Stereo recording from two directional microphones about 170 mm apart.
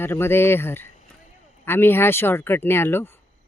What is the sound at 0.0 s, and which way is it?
Speech, 15° left (ahead or behind).